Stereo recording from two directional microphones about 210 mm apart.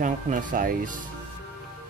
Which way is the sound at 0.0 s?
40° right (ahead or behind).